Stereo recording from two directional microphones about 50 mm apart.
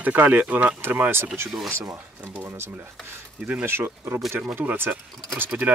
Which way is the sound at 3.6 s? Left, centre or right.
Right.